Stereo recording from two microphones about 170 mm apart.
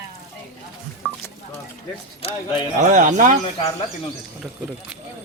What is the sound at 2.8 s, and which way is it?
Speech, 50° right (ahead or behind).